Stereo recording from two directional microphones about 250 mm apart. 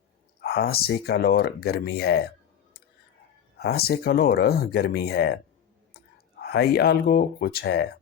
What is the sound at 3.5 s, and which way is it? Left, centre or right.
Speech, left.